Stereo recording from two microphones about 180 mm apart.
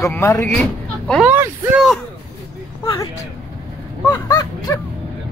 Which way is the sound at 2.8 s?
20° left (ahead or behind).